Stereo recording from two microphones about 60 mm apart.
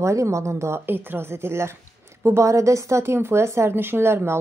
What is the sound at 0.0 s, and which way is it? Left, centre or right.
Speech, right.